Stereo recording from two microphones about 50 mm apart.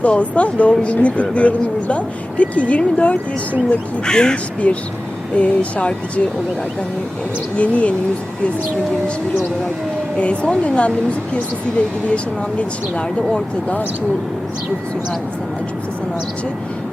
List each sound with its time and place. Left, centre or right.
0.0 s speech: left
4.0 s speech: centre
7.5 s speech: left
10.2 s speech: left
12.1 s speech: left